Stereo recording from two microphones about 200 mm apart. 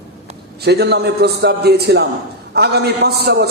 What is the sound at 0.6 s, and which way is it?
A man's voice, 55° right (ahead or behind).